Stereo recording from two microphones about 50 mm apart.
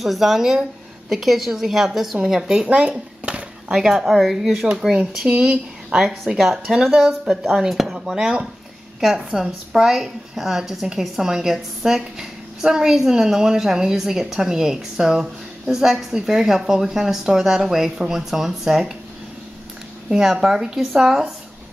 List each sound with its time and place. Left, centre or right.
0.0 s a woman's voice: centre
3.3 s a sound: right
3.7 s a woman's voice: centre
4.9 s speech: centre
5.9 s a woman's voice: centre
20.1 s a woman's voice: centre